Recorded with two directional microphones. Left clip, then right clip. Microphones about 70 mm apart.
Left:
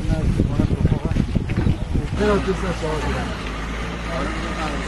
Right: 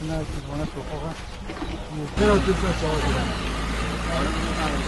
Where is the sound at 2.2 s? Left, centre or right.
Right.